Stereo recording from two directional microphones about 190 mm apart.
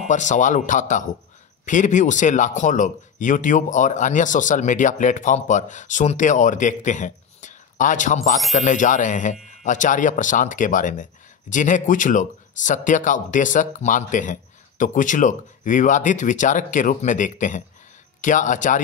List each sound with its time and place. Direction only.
0.1 s speech: 40° left (ahead or behind)